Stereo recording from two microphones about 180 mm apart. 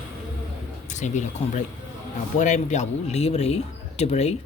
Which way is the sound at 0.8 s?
40° left (ahead or behind).